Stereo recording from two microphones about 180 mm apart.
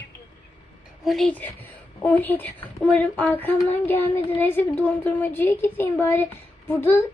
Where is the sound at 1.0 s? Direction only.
Centre (ahead or behind).